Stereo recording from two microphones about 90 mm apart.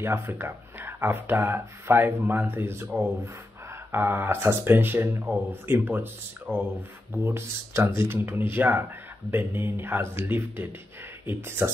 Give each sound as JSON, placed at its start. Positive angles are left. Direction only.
{"t": 0.0, "sound": "speech", "side_deg": -25}